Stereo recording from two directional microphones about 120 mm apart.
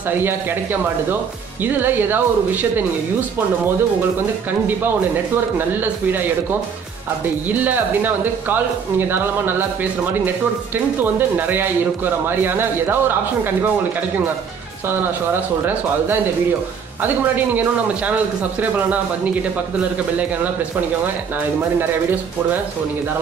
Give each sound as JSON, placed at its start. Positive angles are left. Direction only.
{"t": 0.2, "sound": "speech", "side_deg": -20}
{"t": 1.6, "sound": "speech", "side_deg": -15}
{"t": 5.8, "sound": "speech", "side_deg": -15}
{"t": 7.4, "sound": "speech", "side_deg": -15}
{"t": 11.0, "sound": "speech", "side_deg": -15}
{"t": 17.0, "sound": "speech", "side_deg": -15}